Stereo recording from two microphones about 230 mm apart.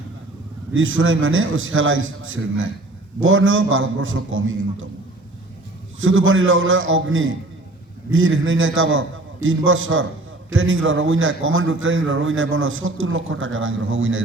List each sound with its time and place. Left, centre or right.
0.7 s a man's voice: right
6.0 s a man's voice: right